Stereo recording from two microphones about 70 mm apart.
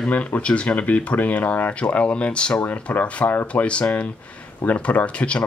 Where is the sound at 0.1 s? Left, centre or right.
Left.